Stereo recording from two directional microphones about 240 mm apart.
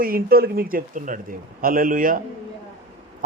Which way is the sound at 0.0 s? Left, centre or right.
Right.